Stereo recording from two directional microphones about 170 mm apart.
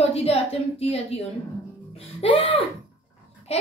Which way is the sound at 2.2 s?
35° left (ahead or behind).